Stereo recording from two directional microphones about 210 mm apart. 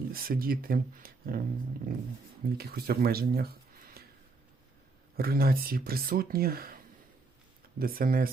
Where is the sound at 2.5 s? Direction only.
45° right (ahead or behind).